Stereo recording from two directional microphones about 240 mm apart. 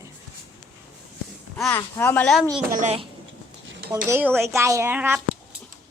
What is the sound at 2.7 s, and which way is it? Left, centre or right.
Speech, right.